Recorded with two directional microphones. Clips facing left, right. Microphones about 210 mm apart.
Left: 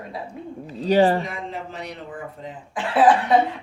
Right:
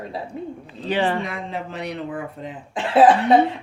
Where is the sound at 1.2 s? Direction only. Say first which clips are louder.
Right 2 dB; 65° right (ahead or behind).